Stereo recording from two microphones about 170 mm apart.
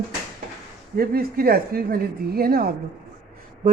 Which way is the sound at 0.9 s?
60° right (ahead or behind).